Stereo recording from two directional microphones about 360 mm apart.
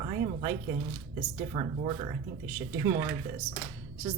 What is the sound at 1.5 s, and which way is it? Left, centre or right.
A woman's voice, centre.